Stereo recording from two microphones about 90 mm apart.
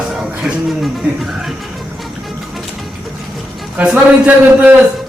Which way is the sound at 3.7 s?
15° right (ahead or behind).